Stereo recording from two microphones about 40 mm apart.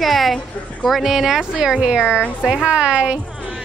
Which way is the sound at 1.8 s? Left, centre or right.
Right.